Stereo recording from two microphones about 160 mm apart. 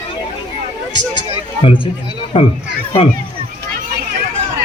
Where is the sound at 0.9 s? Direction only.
30° left (ahead or behind).